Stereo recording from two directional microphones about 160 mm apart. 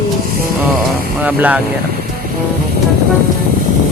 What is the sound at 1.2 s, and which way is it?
Speech, 10° right (ahead or behind).